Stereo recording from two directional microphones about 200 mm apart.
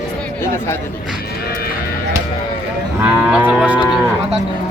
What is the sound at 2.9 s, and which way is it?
Moo, 5° right (ahead or behind).